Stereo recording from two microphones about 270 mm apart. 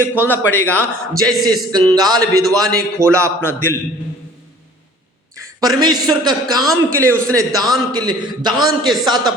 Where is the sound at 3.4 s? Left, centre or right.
Centre.